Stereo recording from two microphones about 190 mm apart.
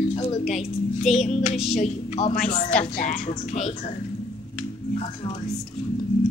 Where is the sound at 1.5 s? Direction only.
Centre (ahead or behind).